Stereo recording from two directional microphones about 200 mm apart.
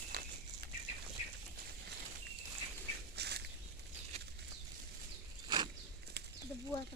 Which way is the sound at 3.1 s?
55° right (ahead or behind).